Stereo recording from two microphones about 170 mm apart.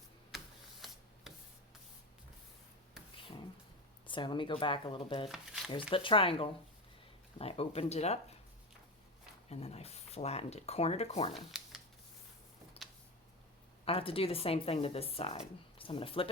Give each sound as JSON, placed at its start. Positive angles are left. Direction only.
{"t": 0.3, "sound": "printer", "side_deg": 0}
{"t": 4.0, "sound": "a woman's voice", "side_deg": 30}
{"t": 5.3, "sound": "speech", "side_deg": 0}
{"t": 5.9, "sound": "a woman's voice", "side_deg": 30}
{"t": 9.5, "sound": "a woman's voice", "side_deg": 40}
{"t": 11.3, "sound": "shuffling cards", "side_deg": 0}
{"t": 12.8, "sound": "a sound", "side_deg": 35}
{"t": 13.8, "sound": "a woman's voice", "side_deg": 35}